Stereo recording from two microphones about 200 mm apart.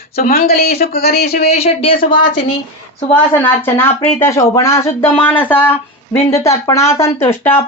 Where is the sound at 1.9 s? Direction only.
45° left (ahead or behind).